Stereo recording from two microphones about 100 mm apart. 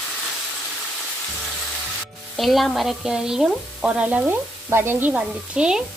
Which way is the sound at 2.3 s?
Centre (ahead or behind).